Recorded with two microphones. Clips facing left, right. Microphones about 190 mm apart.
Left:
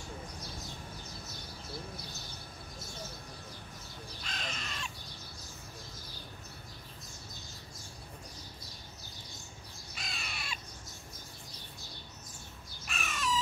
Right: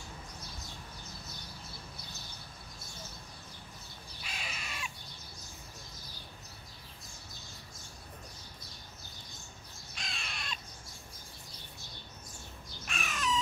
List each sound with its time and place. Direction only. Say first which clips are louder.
4.2 s crow: left 2 dB; 10° right (ahead or behind)
9.9 s crow: even; centre (ahead or behind)
12.8 s crow: even; centre (ahead or behind)